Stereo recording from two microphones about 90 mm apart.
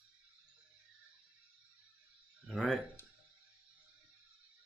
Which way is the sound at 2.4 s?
5° left (ahead or behind).